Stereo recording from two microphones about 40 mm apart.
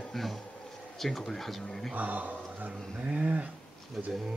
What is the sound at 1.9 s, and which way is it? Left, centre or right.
Speech, right.